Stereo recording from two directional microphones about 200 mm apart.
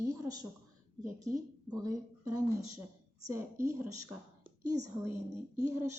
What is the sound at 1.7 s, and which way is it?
A woman's voice, 15° right (ahead or behind).